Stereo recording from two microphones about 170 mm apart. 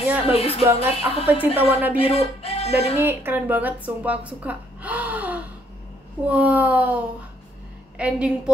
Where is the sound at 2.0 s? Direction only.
40° left (ahead or behind).